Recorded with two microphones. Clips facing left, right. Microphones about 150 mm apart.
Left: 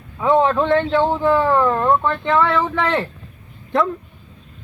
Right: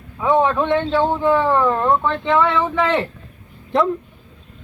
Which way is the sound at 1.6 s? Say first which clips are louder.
Even; 5° right (ahead or behind).